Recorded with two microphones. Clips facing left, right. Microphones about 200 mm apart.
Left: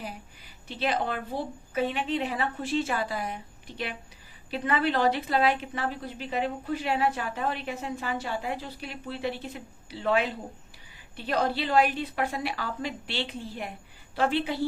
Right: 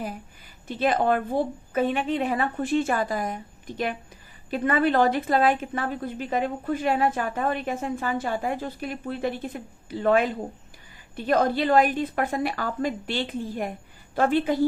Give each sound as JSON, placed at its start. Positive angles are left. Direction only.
{"t": 0.7, "sound": "a woman's voice", "side_deg": -50}